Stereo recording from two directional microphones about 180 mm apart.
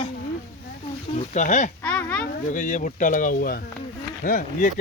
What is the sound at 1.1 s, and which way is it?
Speech, 40° left (ahead or behind).